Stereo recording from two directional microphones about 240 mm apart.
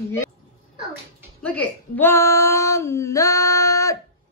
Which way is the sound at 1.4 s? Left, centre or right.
Centre.